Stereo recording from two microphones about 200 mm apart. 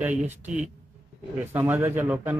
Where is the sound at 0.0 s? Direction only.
10° right (ahead or behind).